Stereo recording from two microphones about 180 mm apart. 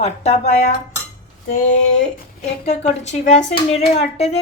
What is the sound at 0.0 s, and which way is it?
Speech, 35° left (ahead or behind).